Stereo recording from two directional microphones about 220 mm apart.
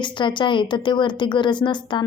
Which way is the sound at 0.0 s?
20° left (ahead or behind).